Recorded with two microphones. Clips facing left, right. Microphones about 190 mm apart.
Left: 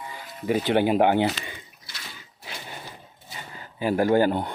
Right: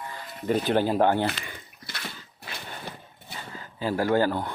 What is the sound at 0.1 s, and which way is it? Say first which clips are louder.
Music: left 1 dB; 5° left (ahead or behind).